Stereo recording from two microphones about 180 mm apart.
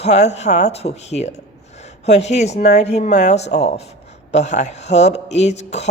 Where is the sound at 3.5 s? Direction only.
65° left (ahead or behind).